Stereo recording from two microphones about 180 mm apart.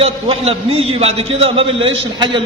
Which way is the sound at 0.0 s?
35° right (ahead or behind).